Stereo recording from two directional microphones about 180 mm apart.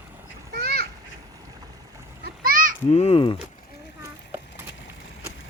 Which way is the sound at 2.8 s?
35° left (ahead or behind).